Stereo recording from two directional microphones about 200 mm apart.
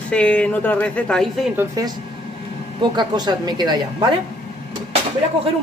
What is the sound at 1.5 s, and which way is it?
Speech, 15° right (ahead or behind).